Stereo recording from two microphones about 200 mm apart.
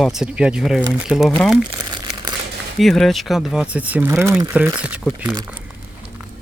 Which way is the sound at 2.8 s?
Centre (ahead or behind).